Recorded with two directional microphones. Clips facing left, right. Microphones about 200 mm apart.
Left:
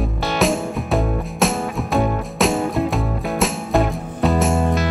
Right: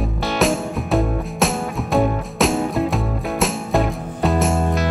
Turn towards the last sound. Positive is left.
turn(degrees=0)  # may be behind; listen again after turning